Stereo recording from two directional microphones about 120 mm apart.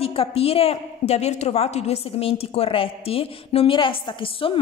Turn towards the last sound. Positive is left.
turn(degrees=45)  # may be behind; listen again after turning